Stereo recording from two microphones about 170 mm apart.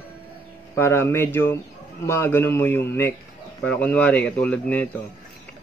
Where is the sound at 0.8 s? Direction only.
15° left (ahead or behind).